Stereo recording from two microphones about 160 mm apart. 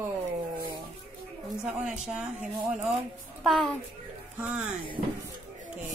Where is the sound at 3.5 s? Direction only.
Centre (ahead or behind).